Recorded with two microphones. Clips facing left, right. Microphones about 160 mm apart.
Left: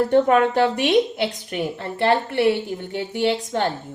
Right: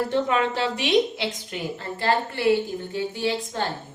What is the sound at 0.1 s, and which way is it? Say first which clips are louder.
A woman's voice: left 7 dB; 50° left (ahead or behind).